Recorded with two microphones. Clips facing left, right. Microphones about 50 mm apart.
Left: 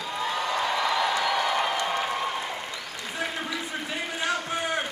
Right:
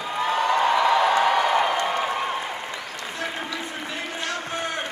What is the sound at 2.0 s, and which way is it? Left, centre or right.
Applause, centre.